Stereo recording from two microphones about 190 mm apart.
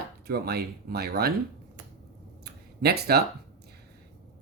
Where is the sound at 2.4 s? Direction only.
55° right (ahead or behind).